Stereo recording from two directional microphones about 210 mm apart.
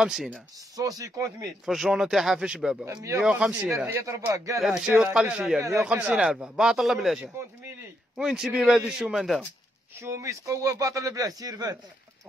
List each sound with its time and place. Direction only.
0.0 s a man's voice: centre (ahead or behind)
0.7 s a man's voice: 15° right (ahead or behind)
1.7 s a man's voice: centre (ahead or behind)
2.8 s a man's voice: 15° right (ahead or behind)
3.2 s a man's voice: 5° right (ahead or behind)
4.6 s a man's voice: 5° right (ahead or behind)
10.0 s a man's voice: 15° right (ahead or behind)